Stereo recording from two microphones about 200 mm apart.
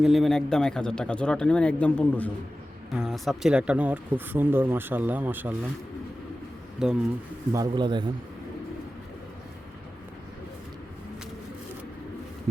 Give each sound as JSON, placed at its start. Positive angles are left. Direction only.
{"t": 0.0, "sound": "speech", "side_deg": 0}
{"t": 6.8, "sound": "speech", "side_deg": -5}
{"t": 7.5, "sound": "a man's voice", "side_deg": -20}